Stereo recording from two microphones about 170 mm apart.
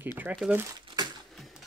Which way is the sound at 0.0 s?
10° right (ahead or behind).